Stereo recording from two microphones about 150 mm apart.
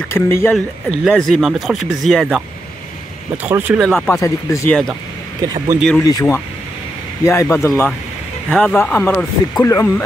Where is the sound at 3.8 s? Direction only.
Centre (ahead or behind).